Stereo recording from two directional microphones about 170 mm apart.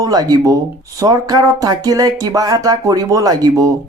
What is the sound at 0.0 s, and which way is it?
Speech, 20° right (ahead or behind).